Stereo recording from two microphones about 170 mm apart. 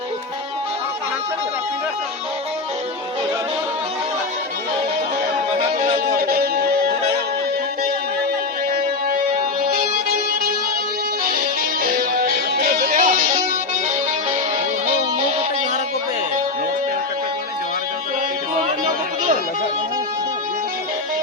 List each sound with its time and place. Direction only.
6.1 s music: 60° right (ahead or behind)
11.3 s music: 55° right (ahead or behind)